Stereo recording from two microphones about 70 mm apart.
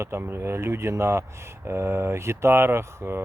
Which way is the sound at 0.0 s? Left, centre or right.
Right.